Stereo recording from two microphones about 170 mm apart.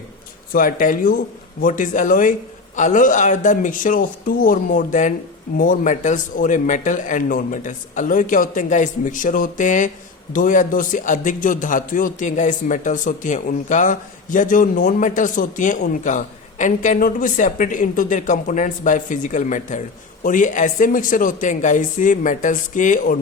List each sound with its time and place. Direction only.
0.5 s a man's voice: 55° left (ahead or behind)